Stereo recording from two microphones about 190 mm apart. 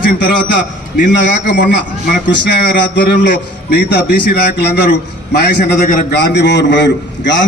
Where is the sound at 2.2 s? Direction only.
70° left (ahead or behind).